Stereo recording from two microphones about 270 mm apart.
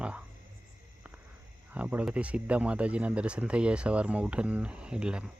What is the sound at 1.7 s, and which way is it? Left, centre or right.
Speech, centre.